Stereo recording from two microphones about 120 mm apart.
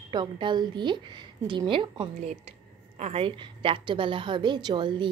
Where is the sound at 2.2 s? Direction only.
70° right (ahead or behind).